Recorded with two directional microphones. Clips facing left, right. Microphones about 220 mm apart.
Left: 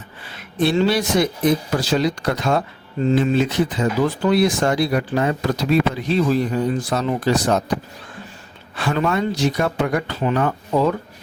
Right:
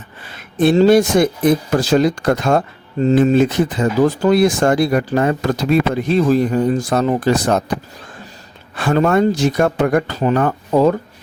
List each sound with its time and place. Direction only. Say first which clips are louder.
0.6 s speech: right 7 dB; 45° right (ahead or behind)
8.7 s speech: right 6 dB; 45° right (ahead or behind)